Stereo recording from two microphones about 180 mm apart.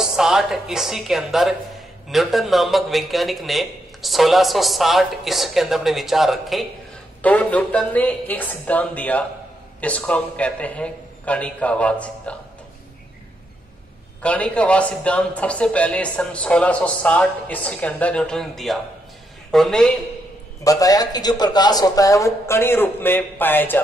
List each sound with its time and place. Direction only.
0.0 s a woman's voice: 5° right (ahead or behind)
14.2 s a man's voice: 5° left (ahead or behind)
20.6 s a man's voice: 20° left (ahead or behind)